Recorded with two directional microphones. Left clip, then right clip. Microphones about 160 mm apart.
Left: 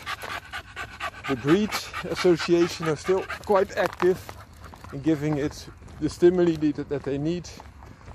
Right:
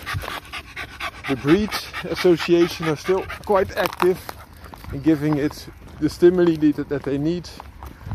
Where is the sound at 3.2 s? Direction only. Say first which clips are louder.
Right 2 dB; 10° left (ahead or behind).